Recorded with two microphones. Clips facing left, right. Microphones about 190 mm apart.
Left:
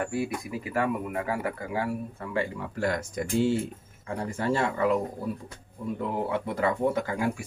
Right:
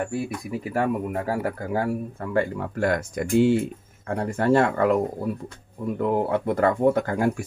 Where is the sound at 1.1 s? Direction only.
45° right (ahead or behind).